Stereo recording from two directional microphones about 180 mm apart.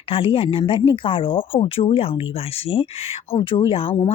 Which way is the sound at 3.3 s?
30° left (ahead or behind).